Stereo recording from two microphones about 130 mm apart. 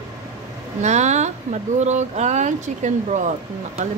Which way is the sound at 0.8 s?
60° right (ahead or behind).